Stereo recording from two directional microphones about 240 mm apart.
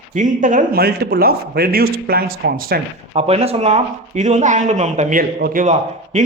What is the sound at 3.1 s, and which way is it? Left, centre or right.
Speech, right.